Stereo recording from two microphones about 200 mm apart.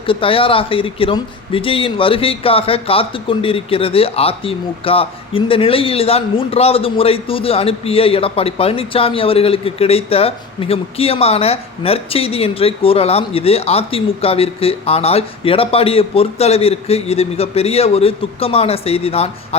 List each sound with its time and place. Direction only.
0.1 s speech: 25° left (ahead or behind)